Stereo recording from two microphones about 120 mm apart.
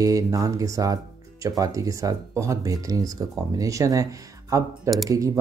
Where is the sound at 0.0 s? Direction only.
30° right (ahead or behind).